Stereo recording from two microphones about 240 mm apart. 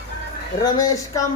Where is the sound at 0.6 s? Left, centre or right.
Centre.